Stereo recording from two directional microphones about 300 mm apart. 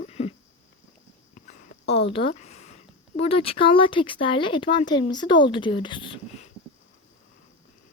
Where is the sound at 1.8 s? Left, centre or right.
Centre.